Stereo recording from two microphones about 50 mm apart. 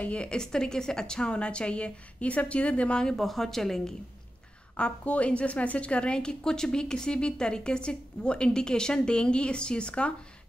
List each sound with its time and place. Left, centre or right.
0.0 s a woman's voice: left
3.2 s speech: centre
4.7 s a woman's voice: left